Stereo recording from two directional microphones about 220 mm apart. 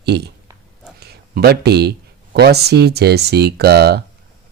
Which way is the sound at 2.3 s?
45° right (ahead or behind).